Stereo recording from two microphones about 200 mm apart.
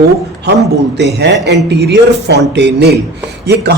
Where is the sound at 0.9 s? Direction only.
60° right (ahead or behind).